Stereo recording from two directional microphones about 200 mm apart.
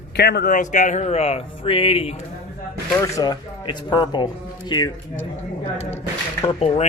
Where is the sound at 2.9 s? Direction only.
15° left (ahead or behind).